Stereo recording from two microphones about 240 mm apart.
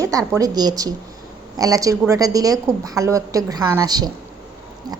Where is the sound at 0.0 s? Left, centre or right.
Centre.